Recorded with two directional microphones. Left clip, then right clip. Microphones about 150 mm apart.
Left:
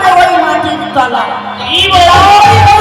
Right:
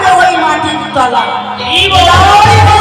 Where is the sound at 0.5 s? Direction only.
5° left (ahead or behind).